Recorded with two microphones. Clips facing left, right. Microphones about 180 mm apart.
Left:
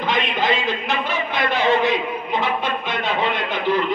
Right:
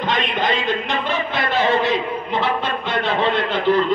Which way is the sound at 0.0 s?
10° left (ahead or behind).